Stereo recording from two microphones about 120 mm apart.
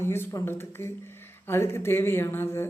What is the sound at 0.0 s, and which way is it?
Speech, 20° left (ahead or behind).